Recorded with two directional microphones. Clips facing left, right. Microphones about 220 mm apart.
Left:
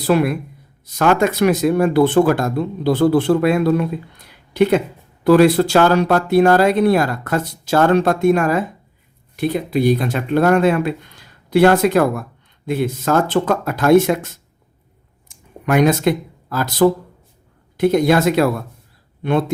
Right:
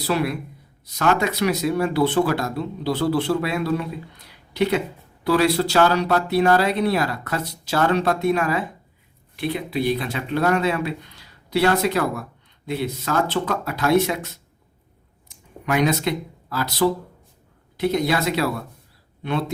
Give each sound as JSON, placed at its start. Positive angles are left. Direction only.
{"t": 0.0, "sound": "speech", "side_deg": 50}